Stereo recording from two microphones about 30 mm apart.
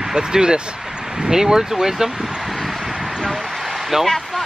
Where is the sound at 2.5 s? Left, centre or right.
Centre.